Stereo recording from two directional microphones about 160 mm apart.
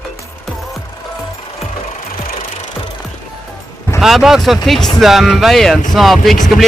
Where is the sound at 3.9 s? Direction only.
Centre (ahead or behind).